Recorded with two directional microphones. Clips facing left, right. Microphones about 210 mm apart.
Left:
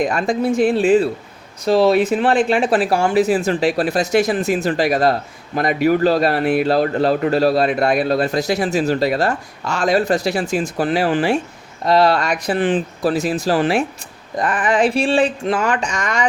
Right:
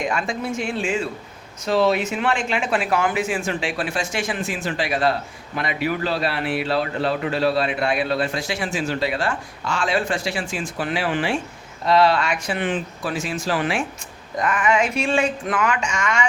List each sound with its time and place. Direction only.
0.0 s a man's voice: 35° left (ahead or behind)